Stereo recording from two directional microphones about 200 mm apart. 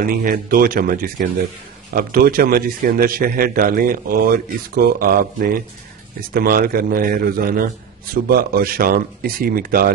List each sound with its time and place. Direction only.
0.0 s a man's voice: 45° right (ahead or behind)